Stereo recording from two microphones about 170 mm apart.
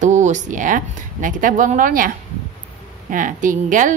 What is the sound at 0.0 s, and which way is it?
Speech, 45° right (ahead or behind).